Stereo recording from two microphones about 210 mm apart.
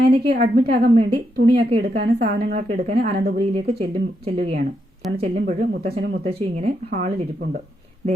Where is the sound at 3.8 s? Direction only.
30° right (ahead or behind).